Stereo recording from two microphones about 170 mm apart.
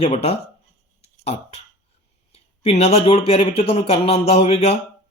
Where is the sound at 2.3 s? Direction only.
40° left (ahead or behind).